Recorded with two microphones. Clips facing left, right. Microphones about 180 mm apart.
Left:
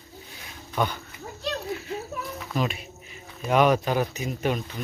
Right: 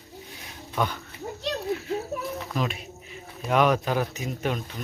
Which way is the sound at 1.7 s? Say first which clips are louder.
Right 3 dB; centre (ahead or behind).